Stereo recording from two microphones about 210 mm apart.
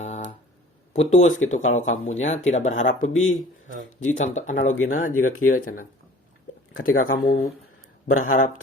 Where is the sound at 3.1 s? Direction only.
75° left (ahead or behind).